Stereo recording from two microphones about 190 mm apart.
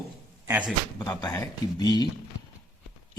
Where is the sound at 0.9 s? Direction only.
20° left (ahead or behind).